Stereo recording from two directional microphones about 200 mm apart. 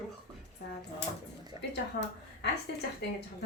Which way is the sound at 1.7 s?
60° left (ahead or behind).